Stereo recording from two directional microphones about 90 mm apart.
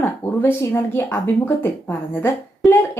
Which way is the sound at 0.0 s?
25° left (ahead or behind).